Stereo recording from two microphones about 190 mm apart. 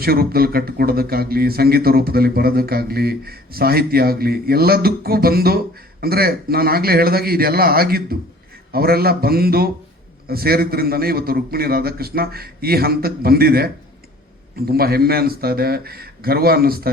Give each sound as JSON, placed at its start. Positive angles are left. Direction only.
{"t": 0.0, "sound": "a man's voice", "side_deg": -55}